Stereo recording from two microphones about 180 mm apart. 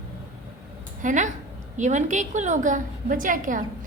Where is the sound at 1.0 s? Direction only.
45° right (ahead or behind).